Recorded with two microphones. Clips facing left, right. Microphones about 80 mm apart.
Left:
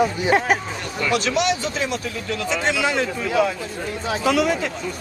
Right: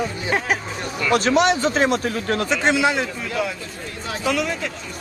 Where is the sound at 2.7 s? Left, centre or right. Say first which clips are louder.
Right 2 dB; right.